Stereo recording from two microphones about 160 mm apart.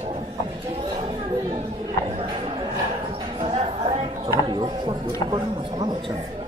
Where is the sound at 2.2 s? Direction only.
35° right (ahead or behind).